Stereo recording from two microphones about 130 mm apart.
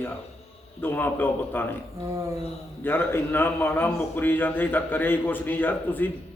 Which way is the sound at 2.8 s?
15° left (ahead or behind).